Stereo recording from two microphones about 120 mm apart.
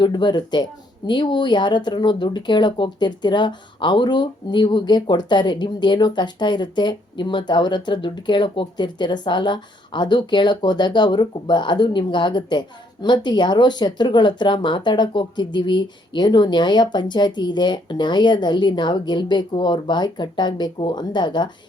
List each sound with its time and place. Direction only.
0.0 s speech: 40° left (ahead or behind)